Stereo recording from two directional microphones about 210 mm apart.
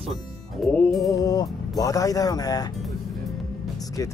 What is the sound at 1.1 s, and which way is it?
Speech, 15° left (ahead or behind).